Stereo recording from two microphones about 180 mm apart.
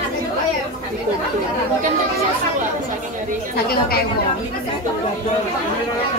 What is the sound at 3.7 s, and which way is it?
Speech, 60° left (ahead or behind).